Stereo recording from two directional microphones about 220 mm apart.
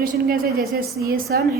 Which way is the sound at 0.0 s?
40° right (ahead or behind).